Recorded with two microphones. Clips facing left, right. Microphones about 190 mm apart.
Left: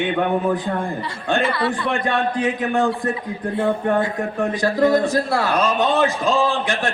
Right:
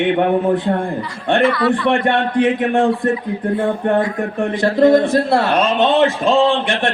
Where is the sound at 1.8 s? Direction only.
65° right (ahead or behind).